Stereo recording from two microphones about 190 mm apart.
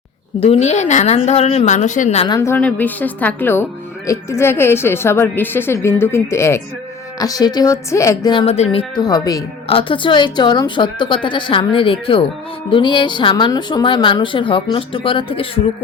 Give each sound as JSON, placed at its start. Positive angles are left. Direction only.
{"t": 0.3, "sound": "speech", "side_deg": 30}
{"t": 2.2, "sound": "a woman's voice", "side_deg": 20}